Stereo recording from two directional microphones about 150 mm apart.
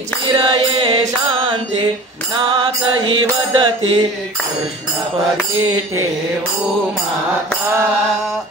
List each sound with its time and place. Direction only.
0.3 s music: 35° right (ahead or behind)
2.3 s mantra: 30° right (ahead or behind)